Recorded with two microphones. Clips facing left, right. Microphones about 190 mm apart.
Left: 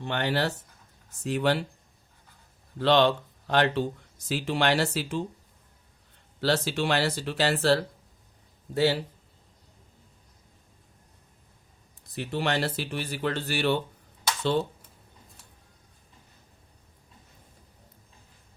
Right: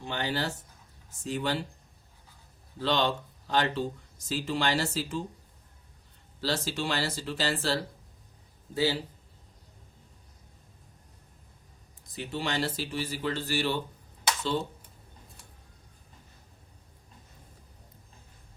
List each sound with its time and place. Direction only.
0.0 s speech: 65° left (ahead or behind)
2.7 s speech: 65° left (ahead or behind)
6.4 s speech: 65° left (ahead or behind)
12.0 s speech: 60° left (ahead or behind)